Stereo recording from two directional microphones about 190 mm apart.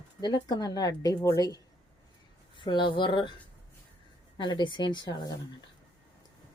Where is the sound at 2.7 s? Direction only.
25° left (ahead or behind).